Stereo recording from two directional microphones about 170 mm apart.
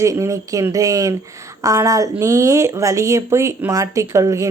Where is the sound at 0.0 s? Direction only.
15° right (ahead or behind).